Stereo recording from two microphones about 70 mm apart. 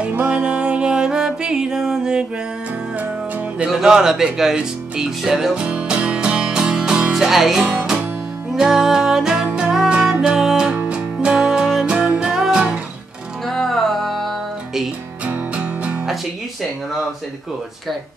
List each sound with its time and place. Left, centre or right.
0.1 s music: centre
3.0 s music: right
3.6 s speech: centre
5.5 s music: centre
13.5 s music: centre
15.2 s music: centre